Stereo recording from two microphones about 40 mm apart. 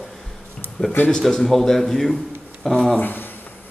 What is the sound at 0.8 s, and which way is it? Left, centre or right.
Speech, left.